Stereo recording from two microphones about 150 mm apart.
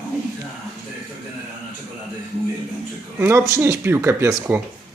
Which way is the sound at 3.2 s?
15° right (ahead or behind).